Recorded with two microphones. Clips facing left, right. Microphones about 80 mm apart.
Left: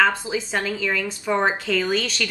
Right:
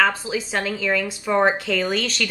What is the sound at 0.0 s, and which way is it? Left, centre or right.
A woman's voice, centre.